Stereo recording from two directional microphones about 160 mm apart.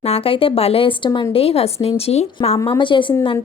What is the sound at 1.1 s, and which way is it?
Speech, 20° left (ahead or behind).